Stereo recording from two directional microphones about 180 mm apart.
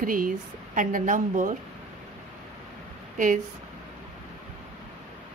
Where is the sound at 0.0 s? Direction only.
50° right (ahead or behind).